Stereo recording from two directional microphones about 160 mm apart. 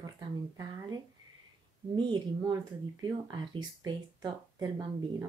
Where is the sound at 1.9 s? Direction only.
30° right (ahead or behind).